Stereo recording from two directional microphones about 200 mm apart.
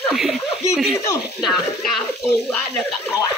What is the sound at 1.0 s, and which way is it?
Speech, 15° left (ahead or behind).